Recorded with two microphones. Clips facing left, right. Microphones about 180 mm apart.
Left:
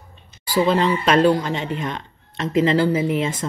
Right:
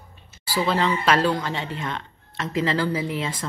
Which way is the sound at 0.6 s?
20° left (ahead or behind).